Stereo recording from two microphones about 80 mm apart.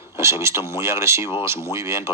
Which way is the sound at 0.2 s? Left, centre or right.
Right.